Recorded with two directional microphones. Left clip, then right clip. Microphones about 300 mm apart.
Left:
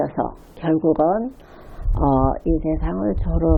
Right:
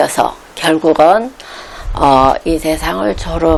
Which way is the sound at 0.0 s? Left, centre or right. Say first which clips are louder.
Right 11 dB; centre.